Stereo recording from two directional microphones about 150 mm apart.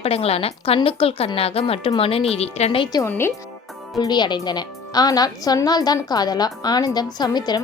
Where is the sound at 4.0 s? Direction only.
30° left (ahead or behind).